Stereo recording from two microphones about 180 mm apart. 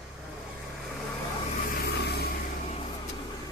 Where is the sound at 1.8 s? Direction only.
60° left (ahead or behind).